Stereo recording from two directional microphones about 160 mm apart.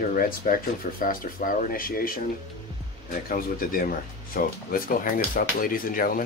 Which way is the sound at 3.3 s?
60° left (ahead or behind).